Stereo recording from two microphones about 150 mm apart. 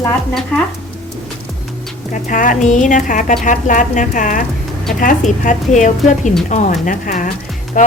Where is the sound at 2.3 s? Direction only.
60° left (ahead or behind).